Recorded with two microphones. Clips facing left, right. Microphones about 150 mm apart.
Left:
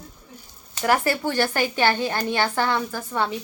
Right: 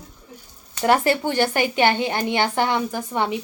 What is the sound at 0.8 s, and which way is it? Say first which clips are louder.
A woman's voice: right 3 dB; 20° right (ahead or behind).